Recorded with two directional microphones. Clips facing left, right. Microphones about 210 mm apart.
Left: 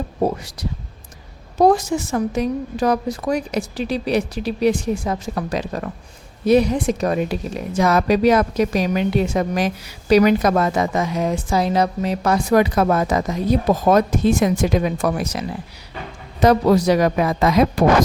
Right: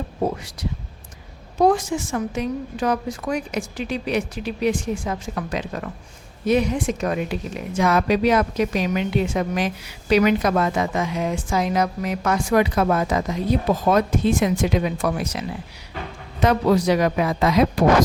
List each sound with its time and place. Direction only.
0.2 s a woman's voice: 40° left (ahead or behind)